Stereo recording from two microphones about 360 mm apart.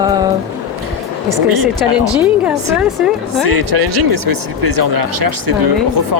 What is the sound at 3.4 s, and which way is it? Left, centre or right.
Speech, right.